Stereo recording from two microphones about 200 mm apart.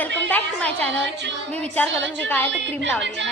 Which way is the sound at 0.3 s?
10° left (ahead or behind).